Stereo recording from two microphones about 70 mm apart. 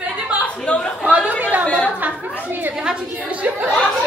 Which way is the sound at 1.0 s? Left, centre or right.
Centre.